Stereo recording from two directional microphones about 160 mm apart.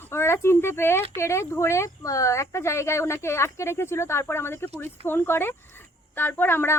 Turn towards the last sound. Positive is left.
turn(degrees=15)  # may be behind; listen again after turning